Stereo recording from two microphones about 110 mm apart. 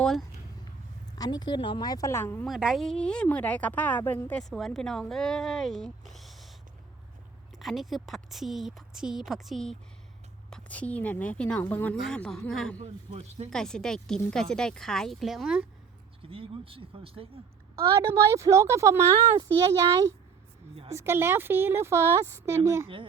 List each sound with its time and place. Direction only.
0.0 s speech: 5° left (ahead or behind)
1.2 s a woman's voice: 40° left (ahead or behind)
2.2 s speech: 15° left (ahead or behind)
2.5 s speech: 5° right (ahead or behind)
2.8 s speech: 5° left (ahead or behind)
4.4 s speech: centre (ahead or behind)
7.5 s speech: centre (ahead or behind)
10.5 s speech: 10° left (ahead or behind)
11.9 s speech: 5° left (ahead or behind)
16.3 s speech: 55° right (ahead or behind)
17.7 s a woman's voice: 30° right (ahead or behind)
20.9 s a woman's voice: 20° right (ahead or behind)